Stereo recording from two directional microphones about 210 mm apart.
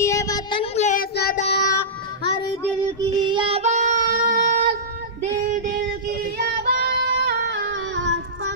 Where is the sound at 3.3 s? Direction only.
25° right (ahead or behind).